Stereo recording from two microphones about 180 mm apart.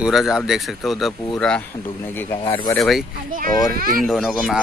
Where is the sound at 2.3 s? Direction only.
30° left (ahead or behind).